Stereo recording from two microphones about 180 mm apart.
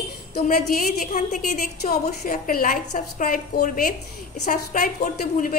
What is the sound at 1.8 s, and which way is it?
A woman's voice, 55° left (ahead or behind).